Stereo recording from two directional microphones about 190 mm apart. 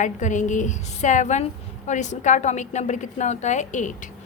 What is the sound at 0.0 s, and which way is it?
A woman's voice, 40° left (ahead or behind).